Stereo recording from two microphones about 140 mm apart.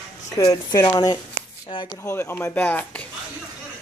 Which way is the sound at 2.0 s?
15° left (ahead or behind).